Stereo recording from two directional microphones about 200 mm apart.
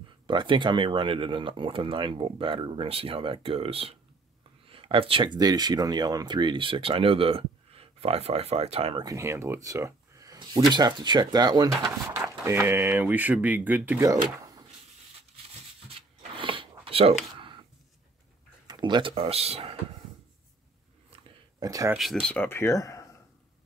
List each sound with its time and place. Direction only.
0.3 s speech: 25° right (ahead or behind)
9.0 s speech: 15° right (ahead or behind)
15.9 s a sound: 25° right (ahead or behind)
18.7 s speech: 20° right (ahead or behind)
21.1 s a sound: 20° right (ahead or behind)
21.9 s speech: centre (ahead or behind)